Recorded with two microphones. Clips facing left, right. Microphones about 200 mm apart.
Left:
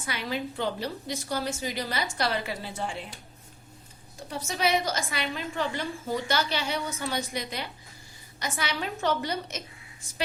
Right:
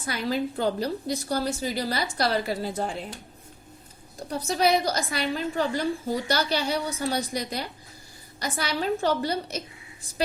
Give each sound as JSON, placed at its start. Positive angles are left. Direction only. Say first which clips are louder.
{"t": 0.0, "sound": "a woman's voice", "louder": "right 5 dB", "side_deg": -35}
{"t": 4.3, "sound": "a woman's voice", "louder": "right 4 dB", "side_deg": -40}